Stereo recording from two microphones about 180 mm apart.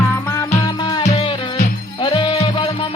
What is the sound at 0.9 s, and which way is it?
Music, 25° left (ahead or behind).